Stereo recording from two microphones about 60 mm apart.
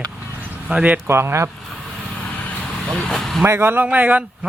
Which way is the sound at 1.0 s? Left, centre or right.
Right.